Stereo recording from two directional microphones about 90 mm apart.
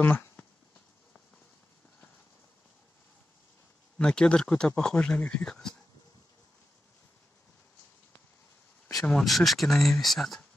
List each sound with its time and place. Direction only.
0.0 s speech: 20° left (ahead or behind)
4.0 s speech: 10° left (ahead or behind)
9.0 s speech: 5° left (ahead or behind)